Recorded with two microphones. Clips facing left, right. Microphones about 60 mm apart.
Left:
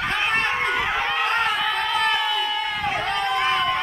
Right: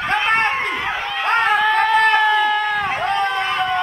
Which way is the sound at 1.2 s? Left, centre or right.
Right.